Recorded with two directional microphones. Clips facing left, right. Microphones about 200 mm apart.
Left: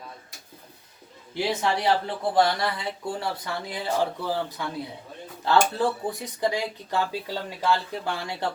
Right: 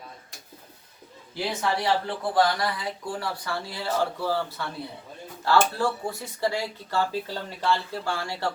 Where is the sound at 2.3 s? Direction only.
25° left (ahead or behind).